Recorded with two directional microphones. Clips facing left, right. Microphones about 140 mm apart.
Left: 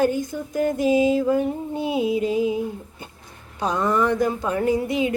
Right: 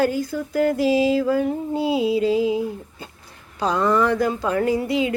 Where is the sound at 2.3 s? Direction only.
25° right (ahead or behind).